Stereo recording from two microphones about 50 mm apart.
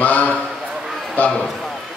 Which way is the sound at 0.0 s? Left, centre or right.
Left.